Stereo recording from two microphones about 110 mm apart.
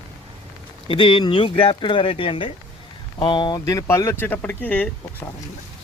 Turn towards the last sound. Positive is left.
turn(degrees=15)  # may be behind; listen again after turning